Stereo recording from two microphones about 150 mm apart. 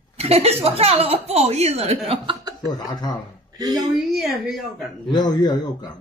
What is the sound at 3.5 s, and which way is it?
Speech, 25° right (ahead or behind).